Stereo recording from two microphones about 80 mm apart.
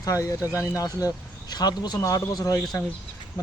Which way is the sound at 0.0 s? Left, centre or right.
Left.